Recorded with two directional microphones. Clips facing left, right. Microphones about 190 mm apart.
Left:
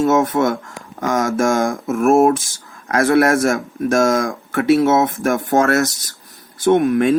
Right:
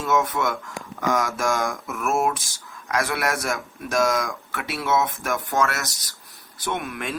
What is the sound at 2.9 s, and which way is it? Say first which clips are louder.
Speech: left 11 dB; 50° left (ahead or behind).